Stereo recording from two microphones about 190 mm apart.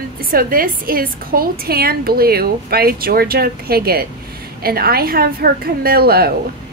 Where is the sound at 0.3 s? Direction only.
50° right (ahead or behind).